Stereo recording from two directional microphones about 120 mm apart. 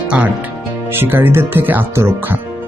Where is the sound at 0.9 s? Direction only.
15° right (ahead or behind).